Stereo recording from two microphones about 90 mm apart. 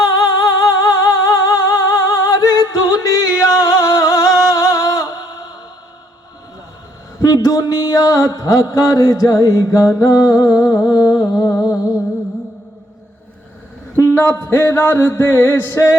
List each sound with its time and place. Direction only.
0.0 s music: 50° left (ahead or behind)
7.4 s mantra: 45° left (ahead or behind)
13.9 s a sound: 20° left (ahead or behind)
14.5 s music: 30° left (ahead or behind)